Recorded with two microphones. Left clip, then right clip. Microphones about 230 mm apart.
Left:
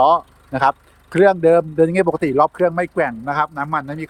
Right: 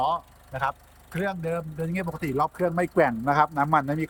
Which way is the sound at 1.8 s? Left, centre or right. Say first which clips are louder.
Left 14 dB; centre.